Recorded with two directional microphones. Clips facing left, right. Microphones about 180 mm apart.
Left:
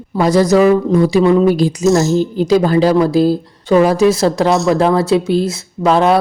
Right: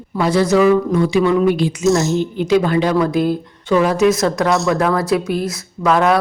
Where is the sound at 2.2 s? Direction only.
35° left (ahead or behind).